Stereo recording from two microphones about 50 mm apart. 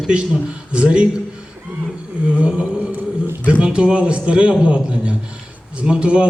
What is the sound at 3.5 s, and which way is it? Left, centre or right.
A man's voice, centre.